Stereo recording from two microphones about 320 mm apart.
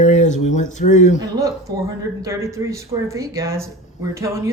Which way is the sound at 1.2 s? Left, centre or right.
Centre.